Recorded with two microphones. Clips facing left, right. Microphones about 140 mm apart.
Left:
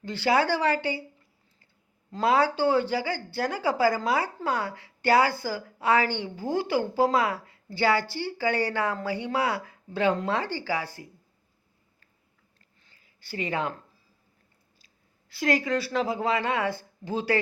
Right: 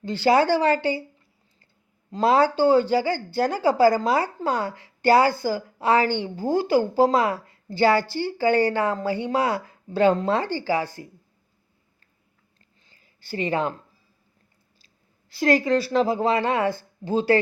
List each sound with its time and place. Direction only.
0.0 s a woman's voice: 30° right (ahead or behind)
2.2 s a woman's voice: 30° right (ahead or behind)
12.8 s a sound: 25° right (ahead or behind)
15.3 s a woman's voice: 25° right (ahead or behind)